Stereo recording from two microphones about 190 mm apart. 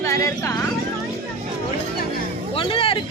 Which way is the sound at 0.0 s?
15° left (ahead or behind).